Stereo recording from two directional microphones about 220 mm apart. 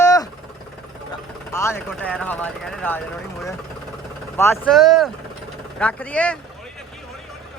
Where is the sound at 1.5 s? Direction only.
10° left (ahead or behind).